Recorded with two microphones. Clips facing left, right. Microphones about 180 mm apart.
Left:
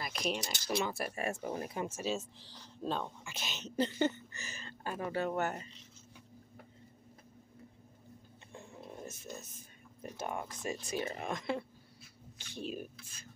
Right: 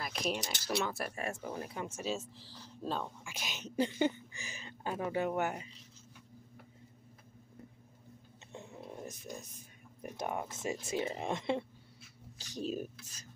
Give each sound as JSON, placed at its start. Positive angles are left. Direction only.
{"t": 0.0, "sound": "a sound", "side_deg": 0}
{"t": 0.7, "sound": "speech", "side_deg": 5}
{"t": 1.5, "sound": "speech", "side_deg": 20}
{"t": 2.0, "sound": "speech", "side_deg": 0}
{"t": 8.5, "sound": "a sound", "side_deg": -20}
{"t": 10.0, "sound": "speech", "side_deg": -15}
{"t": 12.4, "sound": "speech", "side_deg": -40}